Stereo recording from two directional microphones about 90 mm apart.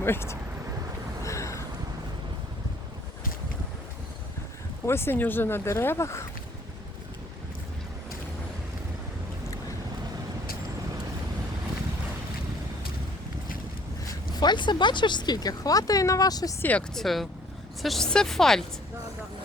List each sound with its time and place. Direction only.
0.0 s speech: 25° left (ahead or behind)
1.2 s boat: 35° left (ahead or behind)
4.9 s speech: 25° left (ahead or behind)
14.1 s speech: 50° left (ahead or behind)
16.6 s speech: 20° left (ahead or behind)
16.9 s speech: centre (ahead or behind)